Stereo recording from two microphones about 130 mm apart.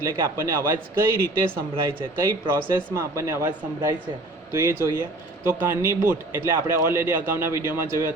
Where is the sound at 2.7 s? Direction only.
20° right (ahead or behind).